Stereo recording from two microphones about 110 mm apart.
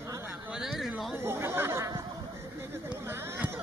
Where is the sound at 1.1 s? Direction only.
25° right (ahead or behind).